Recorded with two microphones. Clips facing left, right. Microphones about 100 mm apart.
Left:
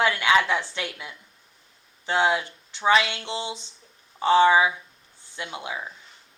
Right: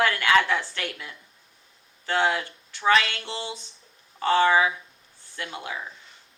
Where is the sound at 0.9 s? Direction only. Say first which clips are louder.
Even; 20° left (ahead or behind).